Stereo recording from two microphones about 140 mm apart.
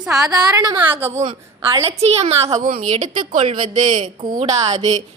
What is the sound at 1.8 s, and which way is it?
Speech, 45° right (ahead or behind).